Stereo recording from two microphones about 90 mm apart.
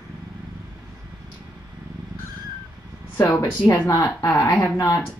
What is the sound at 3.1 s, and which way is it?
Speech, 30° left (ahead or behind).